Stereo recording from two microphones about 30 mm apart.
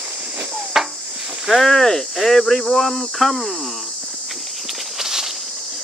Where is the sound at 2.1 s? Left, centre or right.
Centre.